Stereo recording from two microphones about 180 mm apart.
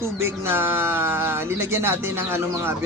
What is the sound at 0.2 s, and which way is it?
Speech, 15° right (ahead or behind).